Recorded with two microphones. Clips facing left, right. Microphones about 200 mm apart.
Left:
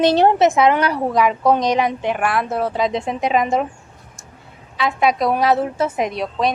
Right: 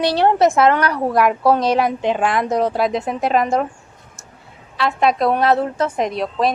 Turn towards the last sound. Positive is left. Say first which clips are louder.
# right 1 dB
turn(degrees=0)  # may be behind; listen again after turning